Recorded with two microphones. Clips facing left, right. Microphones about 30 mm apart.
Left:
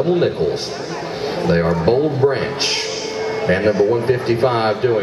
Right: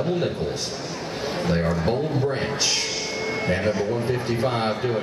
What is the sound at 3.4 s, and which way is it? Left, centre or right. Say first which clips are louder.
A man's voice: left 9 dB; left.